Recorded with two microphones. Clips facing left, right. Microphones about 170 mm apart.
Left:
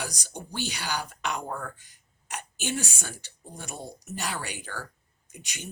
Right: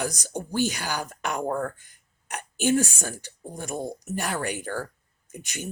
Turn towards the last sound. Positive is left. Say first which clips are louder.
# right 7 dB
turn(degrees=-50)  # may be behind; listen again after turning